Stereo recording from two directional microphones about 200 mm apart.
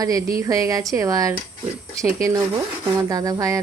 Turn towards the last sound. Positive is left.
turn(degrees=-15)  # may be behind; listen again after turning